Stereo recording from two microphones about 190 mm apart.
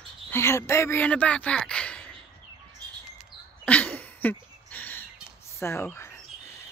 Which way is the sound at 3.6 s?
5° left (ahead or behind).